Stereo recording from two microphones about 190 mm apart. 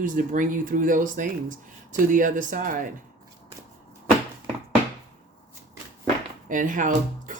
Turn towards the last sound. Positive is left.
turn(degrees=-40)  # may be behind; listen again after turning